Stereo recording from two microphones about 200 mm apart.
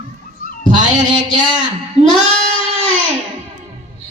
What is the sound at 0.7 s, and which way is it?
Cat, 40° right (ahead or behind).